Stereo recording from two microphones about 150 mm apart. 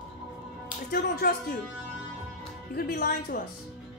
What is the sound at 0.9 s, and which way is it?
Speech, 85° left.